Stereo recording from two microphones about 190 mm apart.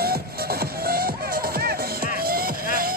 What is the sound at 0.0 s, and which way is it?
Music, 55° right (ahead or behind).